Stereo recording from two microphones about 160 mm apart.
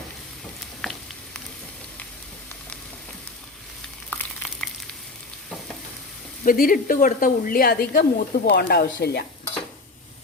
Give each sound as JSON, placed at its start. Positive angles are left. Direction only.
{"t": 0.8, "sound": "frying", "side_deg": 0}
{"t": 4.1, "sound": "frying", "side_deg": 5}
{"t": 6.4, "sound": "a woman's voice", "side_deg": 60}